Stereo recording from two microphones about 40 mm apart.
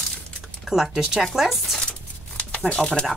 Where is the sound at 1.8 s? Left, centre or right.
Left.